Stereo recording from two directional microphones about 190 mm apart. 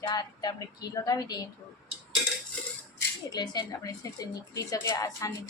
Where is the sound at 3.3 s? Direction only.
20° left (ahead or behind).